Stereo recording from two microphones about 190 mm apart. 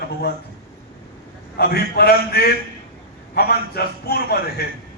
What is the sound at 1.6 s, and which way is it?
A man's voice, 55° left (ahead or behind).